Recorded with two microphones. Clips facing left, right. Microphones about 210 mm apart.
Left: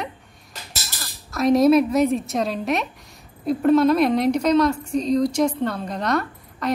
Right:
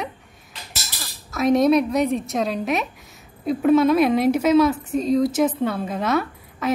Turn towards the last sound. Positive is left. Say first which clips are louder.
# right 1 dB
turn(degrees=-5)  # may be behind; listen again after turning